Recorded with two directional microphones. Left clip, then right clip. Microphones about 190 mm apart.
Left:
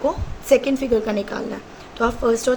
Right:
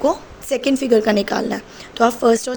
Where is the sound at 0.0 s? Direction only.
40° right (ahead or behind).